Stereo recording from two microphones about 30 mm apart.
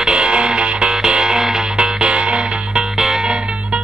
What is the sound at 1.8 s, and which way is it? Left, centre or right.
Music, right.